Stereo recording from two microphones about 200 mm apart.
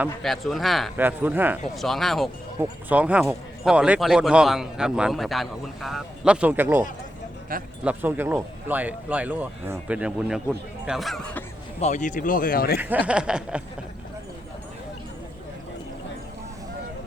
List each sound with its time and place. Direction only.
0.0 s speech: centre (ahead or behind)
7.5 s speech: 45° right (ahead or behind)
7.9 s speech: 10° right (ahead or behind)
11.8 s speech: 35° left (ahead or behind)
12.8 s speech: 10° right (ahead or behind)